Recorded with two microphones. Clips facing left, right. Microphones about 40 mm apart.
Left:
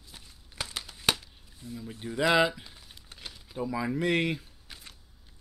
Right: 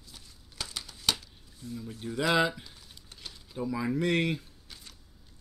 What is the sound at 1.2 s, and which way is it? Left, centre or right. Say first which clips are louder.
Speech: right 1 dB; centre.